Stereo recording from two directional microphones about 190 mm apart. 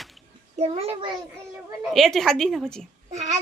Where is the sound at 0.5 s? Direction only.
30° right (ahead or behind).